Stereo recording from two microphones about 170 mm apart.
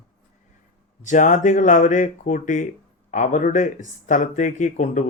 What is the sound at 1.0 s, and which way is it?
Speech, 45° left (ahead or behind).